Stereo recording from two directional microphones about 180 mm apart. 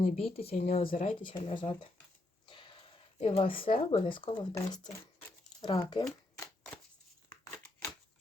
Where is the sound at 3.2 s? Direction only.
30° left (ahead or behind).